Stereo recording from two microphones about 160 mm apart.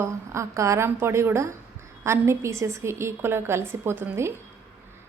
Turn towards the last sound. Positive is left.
turn(degrees=-15)  # may be behind; listen again after turning